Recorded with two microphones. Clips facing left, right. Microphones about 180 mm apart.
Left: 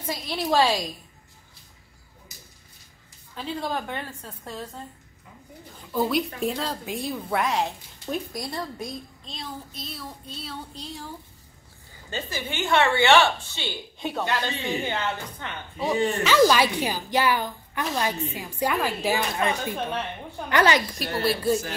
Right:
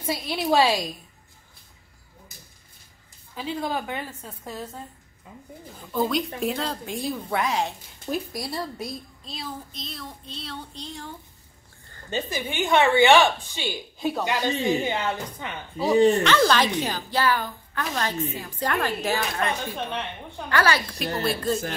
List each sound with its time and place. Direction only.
0.0 s a woman's voice: 10° right (ahead or behind)
3.3 s a woman's voice: 10° right (ahead or behind)
5.9 s a woman's voice: 5° left (ahead or behind)
12.1 s a woman's voice: 15° right (ahead or behind)
14.2 s a woman's voice: 15° right (ahead or behind)
16.3 s a woman's voice: 10° left (ahead or behind)
21.0 s a woman's voice: centre (ahead or behind)